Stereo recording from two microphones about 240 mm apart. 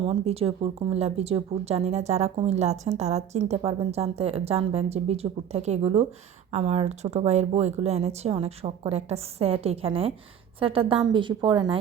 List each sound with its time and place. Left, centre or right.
0.0 s speech: right